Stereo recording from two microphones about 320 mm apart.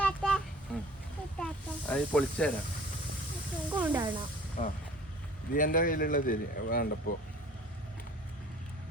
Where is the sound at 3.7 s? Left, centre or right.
Centre.